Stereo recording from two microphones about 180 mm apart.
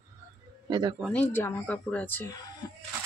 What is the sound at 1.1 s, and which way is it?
A woman's voice, 10° left (ahead or behind).